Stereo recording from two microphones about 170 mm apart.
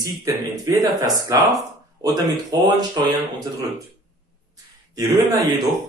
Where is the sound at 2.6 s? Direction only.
20° right (ahead or behind).